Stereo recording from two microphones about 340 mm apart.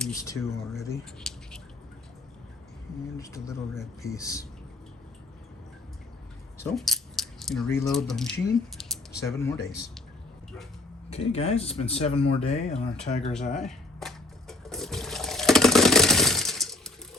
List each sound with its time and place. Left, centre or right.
0.0 s speech: centre
3.2 s speech: centre
6.6 s speech: centre
11.1 s speech: centre
13.6 s toilet flush: centre